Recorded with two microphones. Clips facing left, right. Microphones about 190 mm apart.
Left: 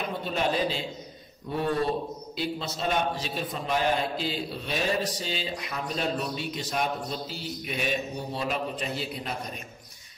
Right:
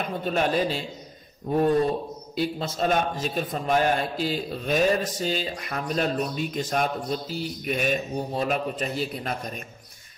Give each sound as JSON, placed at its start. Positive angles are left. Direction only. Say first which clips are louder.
{"t": 0.2, "sound": "a man's voice", "louder": "right 4 dB", "side_deg": -50}
{"t": 2.3, "sound": "a man's voice", "louder": "right 5 dB", "side_deg": -50}